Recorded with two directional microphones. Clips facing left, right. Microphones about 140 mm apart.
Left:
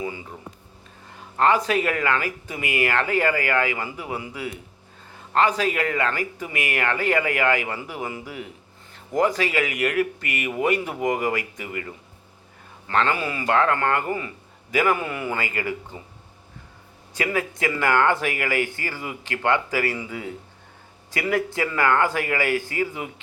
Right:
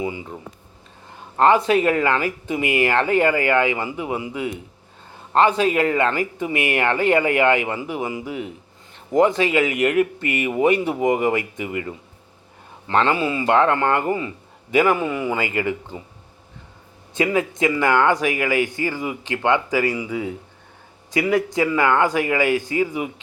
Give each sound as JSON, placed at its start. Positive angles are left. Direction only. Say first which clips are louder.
{"t": 0.0, "sound": "speech", "louder": "right 4 dB", "side_deg": -20}
{"t": 1.4, "sound": "speech", "louder": "right 4 dB", "side_deg": -30}
{"t": 12.9, "sound": "speech", "louder": "right 4 dB", "side_deg": -25}
{"t": 15.0, "sound": "speech", "louder": "right 6 dB", "side_deg": 0}
{"t": 15.3, "sound": "speech", "louder": "right 5 dB", "side_deg": -20}
{"t": 17.2, "sound": "speech", "louder": "right 5 dB", "side_deg": -20}